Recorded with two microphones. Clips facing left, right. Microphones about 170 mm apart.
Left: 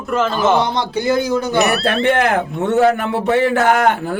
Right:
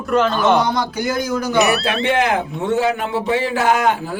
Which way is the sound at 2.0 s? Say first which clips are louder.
Left 2 dB; 55° left (ahead or behind).